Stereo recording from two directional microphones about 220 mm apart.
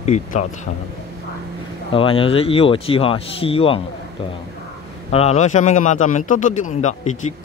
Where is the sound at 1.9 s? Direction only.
25° left (ahead or behind).